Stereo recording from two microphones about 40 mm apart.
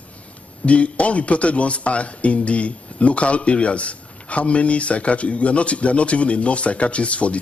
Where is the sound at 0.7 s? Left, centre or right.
Left.